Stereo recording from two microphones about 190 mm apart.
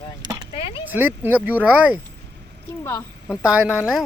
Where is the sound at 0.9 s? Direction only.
10° right (ahead or behind).